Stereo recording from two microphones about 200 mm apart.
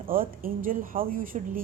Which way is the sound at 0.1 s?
45° right (ahead or behind).